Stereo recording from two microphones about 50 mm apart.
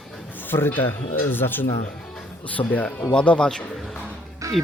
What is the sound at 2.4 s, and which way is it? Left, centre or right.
Speech, left.